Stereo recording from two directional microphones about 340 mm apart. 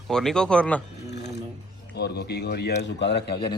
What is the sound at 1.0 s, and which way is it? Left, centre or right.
Mechanisms, left.